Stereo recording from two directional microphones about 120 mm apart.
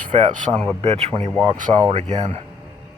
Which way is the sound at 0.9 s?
60° right (ahead or behind).